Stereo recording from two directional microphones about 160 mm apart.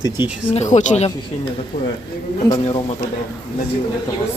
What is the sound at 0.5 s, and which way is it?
Speech, 50° left (ahead or behind).